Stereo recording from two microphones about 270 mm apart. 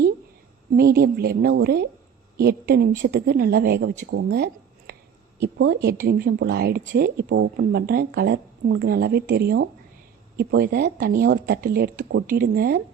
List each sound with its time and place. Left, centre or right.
0.8 s a woman's voice: right